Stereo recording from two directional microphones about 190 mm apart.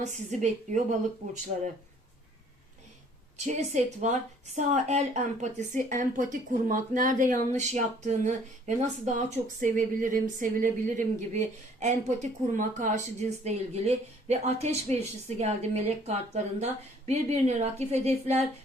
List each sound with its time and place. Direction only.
0.0 s a woman's voice: 40° right (ahead or behind)
3.3 s a woman's voice: 35° right (ahead or behind)